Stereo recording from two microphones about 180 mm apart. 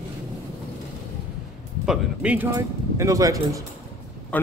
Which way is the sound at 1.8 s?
10° right (ahead or behind).